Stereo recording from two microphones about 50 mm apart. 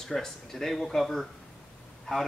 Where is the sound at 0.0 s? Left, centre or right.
Centre.